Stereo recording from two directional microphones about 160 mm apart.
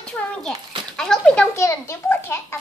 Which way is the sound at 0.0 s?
Centre (ahead or behind).